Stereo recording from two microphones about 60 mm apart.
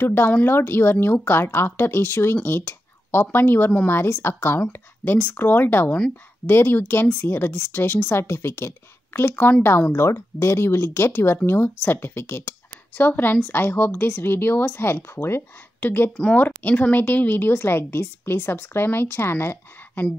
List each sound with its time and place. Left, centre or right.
0.0 s speech: left